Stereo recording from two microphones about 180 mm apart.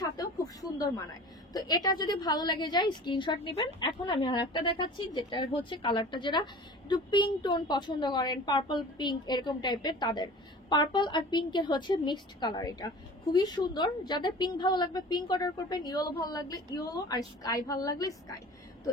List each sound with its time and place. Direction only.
0.6 s a woman's voice: 20° left (ahead or behind)